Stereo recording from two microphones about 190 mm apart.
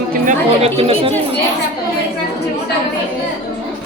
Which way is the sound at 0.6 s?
30° right (ahead or behind).